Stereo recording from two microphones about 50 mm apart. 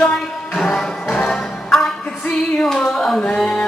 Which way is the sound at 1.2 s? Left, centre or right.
Left.